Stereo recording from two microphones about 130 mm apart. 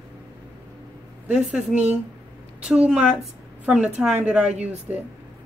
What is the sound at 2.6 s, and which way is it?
A woman's voice, 10° right (ahead or behind).